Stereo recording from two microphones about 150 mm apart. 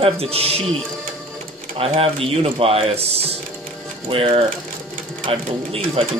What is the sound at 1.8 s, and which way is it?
Speech, 40° right (ahead or behind).